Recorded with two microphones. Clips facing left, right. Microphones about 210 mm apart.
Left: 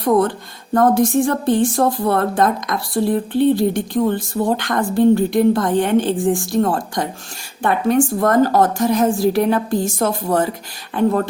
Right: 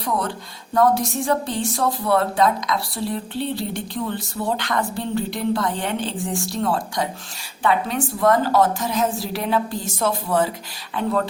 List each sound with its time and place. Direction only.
0.7 s speech: 50° left (ahead or behind)